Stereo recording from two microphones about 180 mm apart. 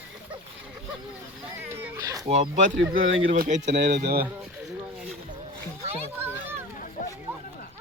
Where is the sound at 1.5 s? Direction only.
10° right (ahead or behind).